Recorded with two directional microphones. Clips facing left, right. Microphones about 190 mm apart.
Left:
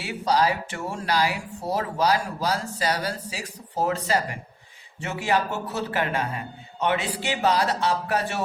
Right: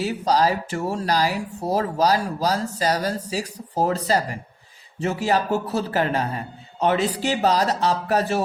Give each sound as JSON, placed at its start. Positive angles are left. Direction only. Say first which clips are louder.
{"t": 0.0, "sound": "speech", "louder": "right 3 dB", "side_deg": -40}